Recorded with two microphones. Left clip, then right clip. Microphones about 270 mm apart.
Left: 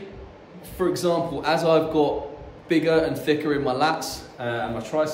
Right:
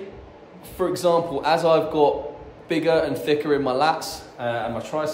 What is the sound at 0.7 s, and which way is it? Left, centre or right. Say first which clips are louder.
A man's voice: right 3 dB; centre.